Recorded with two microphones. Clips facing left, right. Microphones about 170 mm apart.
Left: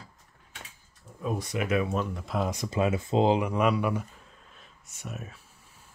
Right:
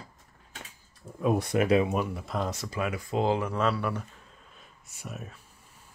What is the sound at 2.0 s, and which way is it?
Speech, centre (ahead or behind).